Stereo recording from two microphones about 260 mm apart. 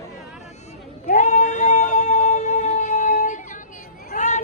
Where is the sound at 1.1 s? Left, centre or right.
Left.